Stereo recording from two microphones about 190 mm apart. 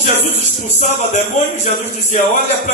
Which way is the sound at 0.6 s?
40° left (ahead or behind).